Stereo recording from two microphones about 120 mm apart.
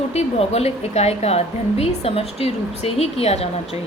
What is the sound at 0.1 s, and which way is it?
A woman's voice, 60° left (ahead or behind).